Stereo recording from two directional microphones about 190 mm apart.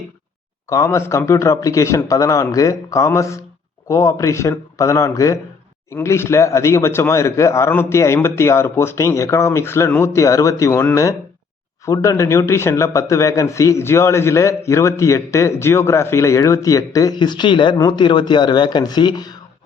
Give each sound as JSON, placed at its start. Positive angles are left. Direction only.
{"t": 0.7, "sound": "a man's voice", "side_deg": 15}